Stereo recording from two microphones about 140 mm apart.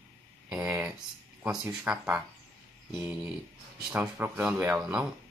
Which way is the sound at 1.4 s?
5° right (ahead or behind).